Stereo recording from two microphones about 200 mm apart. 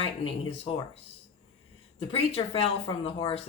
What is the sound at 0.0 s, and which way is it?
Speech, 30° left (ahead or behind).